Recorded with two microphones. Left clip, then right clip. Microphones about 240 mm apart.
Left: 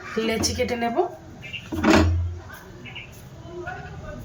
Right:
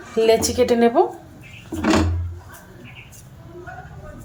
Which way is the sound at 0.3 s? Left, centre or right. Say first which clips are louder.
Right 9 dB; right.